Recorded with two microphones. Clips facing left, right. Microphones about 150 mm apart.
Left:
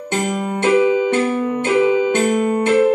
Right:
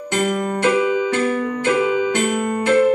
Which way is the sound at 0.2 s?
20° left (ahead or behind).